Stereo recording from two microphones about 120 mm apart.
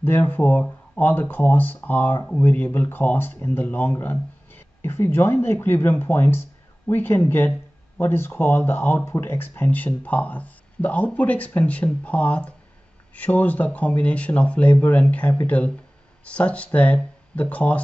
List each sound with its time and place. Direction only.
0.0 s speech: 15° left (ahead or behind)